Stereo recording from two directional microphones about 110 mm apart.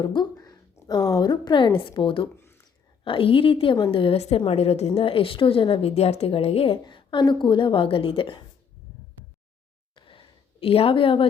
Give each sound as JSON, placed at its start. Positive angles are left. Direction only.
{"t": 0.0, "sound": "a woman's voice", "side_deg": 45}
{"t": 2.3, "sound": "a sound", "side_deg": 25}
{"t": 3.0, "sound": "a woman's voice", "side_deg": 55}
{"t": 4.9, "sound": "a woman's voice", "side_deg": 55}
{"t": 5.9, "sound": "a woman's voice", "side_deg": 75}
{"t": 6.8, "sound": "a woman's voice", "side_deg": 45}
{"t": 9.9, "sound": "a sound", "side_deg": 50}